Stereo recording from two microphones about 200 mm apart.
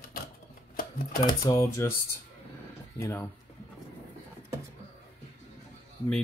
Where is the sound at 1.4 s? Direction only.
15° left (ahead or behind).